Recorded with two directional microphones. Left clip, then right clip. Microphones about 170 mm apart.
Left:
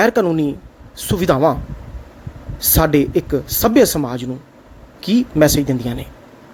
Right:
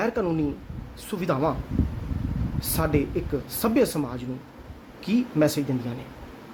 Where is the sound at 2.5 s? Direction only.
30° left (ahead or behind).